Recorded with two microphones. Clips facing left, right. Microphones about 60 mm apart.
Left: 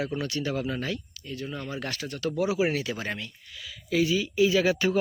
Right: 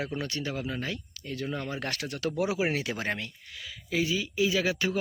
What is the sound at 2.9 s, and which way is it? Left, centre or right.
Speech, right.